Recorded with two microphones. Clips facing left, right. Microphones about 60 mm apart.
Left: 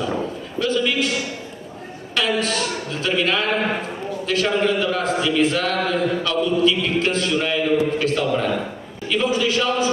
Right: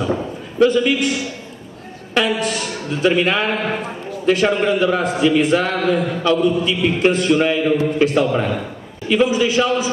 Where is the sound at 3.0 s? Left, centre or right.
Right.